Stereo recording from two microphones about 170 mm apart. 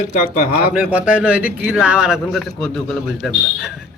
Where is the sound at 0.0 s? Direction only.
50° left (ahead or behind).